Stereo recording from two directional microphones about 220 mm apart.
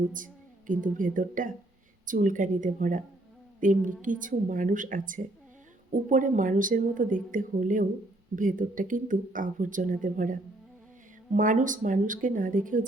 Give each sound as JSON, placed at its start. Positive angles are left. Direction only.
{"t": 0.9, "sound": "speech", "side_deg": -35}